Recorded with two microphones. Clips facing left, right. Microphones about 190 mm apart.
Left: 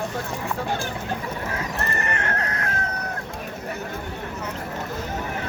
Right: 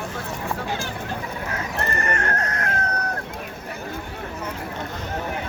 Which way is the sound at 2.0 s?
45° right (ahead or behind).